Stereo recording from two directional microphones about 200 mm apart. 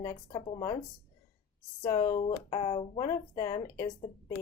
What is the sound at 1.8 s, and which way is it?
Speech, 20° left (ahead or behind).